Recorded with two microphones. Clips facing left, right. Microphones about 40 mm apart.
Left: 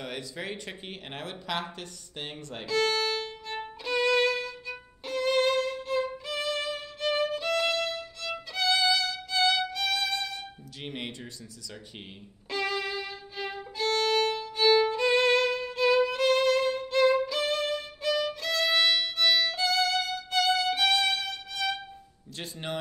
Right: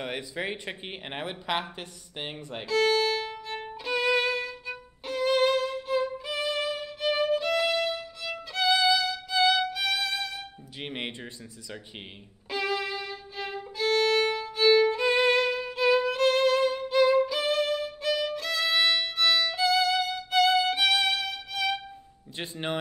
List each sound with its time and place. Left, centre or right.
0.0 s speech: right
2.7 s violin: centre
10.8 s a sound: right
12.4 s violin: centre
22.4 s speech: right